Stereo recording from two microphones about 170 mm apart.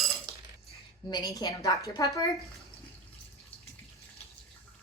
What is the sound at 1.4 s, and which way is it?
Speech, 20° left (ahead or behind).